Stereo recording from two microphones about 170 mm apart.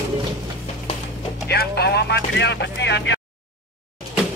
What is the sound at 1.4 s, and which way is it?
Vehicle, 70° left (ahead or behind).